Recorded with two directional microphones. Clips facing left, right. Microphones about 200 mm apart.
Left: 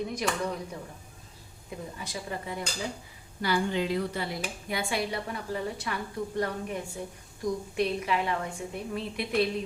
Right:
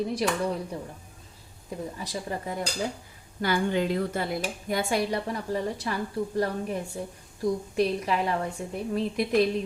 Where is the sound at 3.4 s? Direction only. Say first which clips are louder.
Right 2 dB; 50° right (ahead or behind).